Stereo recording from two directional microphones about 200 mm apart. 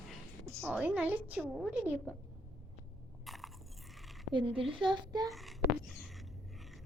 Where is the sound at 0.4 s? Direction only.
10° right (ahead or behind).